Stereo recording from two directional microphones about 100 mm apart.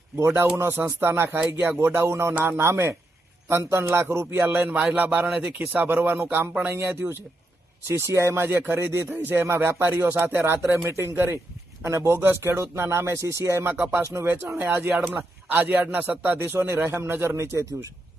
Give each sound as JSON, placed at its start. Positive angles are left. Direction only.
{"t": 0.2, "sound": "a man's voice", "side_deg": -25}